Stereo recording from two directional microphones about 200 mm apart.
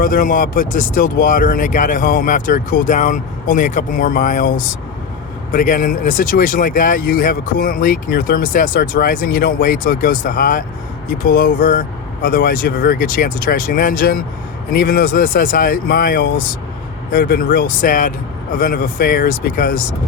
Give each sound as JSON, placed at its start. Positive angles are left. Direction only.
{"t": 0.0, "sound": "speech", "side_deg": 45}